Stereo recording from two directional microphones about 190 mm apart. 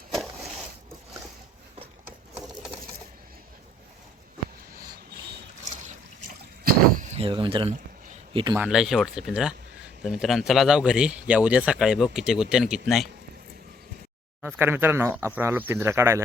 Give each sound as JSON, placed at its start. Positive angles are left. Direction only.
{"t": 6.9, "sound": "a sound", "side_deg": -35}
{"t": 8.3, "sound": "a man's voice", "side_deg": -30}
{"t": 8.5, "sound": "speech", "side_deg": -5}
{"t": 14.4, "sound": "speech", "side_deg": -10}